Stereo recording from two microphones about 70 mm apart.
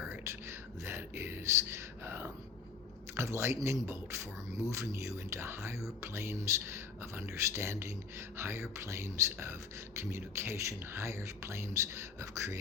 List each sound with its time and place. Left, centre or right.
0.3 s whispering: right
2.0 s a sound: right
3.2 s speech: right